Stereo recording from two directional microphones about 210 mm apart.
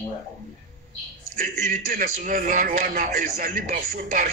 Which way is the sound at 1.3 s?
40° right (ahead or behind).